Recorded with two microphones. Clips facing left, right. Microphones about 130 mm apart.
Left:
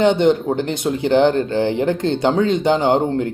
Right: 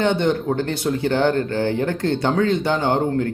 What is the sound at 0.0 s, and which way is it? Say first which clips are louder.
Speech: left 5 dB; 20° left (ahead or behind).